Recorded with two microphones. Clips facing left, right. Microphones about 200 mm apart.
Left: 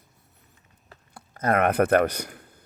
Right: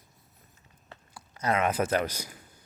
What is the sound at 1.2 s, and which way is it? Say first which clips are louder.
A man's voice: left 5 dB; 55° left (ahead or behind).